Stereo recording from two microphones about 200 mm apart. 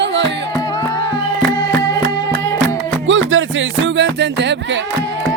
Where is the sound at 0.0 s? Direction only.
60° right (ahead or behind).